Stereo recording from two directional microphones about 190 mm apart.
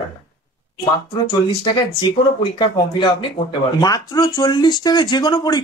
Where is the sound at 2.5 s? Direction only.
25° left (ahead or behind).